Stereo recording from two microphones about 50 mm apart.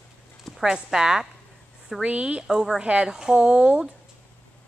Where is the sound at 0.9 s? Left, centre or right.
Centre.